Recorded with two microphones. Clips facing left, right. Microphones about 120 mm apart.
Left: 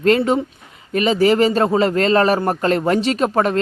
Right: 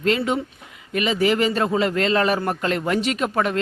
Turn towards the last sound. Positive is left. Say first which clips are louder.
# left 5 dB
turn(degrees=40)  # may be behind; listen again after turning